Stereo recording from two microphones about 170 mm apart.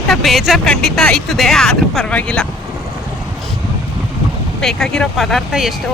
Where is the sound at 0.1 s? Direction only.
Centre (ahead or behind).